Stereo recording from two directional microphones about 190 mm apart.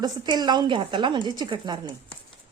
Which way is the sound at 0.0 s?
20° right (ahead or behind).